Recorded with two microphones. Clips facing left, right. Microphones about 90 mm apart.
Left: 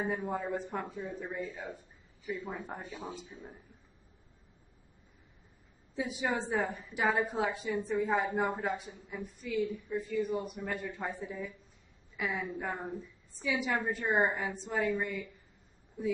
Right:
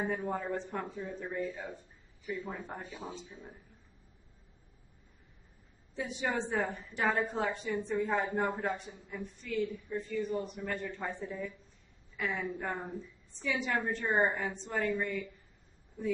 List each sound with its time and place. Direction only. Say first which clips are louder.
0.2 s speech: even; 15° left (ahead or behind)
5.9 s a woman's voice: left 1 dB; 5° left (ahead or behind)